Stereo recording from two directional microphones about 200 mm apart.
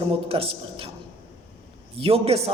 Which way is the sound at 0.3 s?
30° right (ahead or behind).